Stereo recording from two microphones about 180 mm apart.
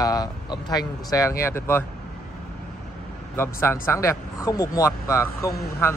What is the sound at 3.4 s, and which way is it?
Speech, 15° left (ahead or behind).